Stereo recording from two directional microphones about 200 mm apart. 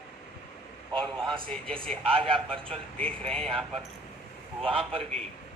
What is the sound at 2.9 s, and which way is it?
Speech, 5° left (ahead or behind).